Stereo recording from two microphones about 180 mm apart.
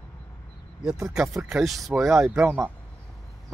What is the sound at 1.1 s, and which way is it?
Speech, centre (ahead or behind).